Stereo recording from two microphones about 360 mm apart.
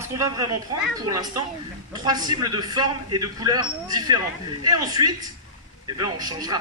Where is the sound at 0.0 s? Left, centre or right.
Centre.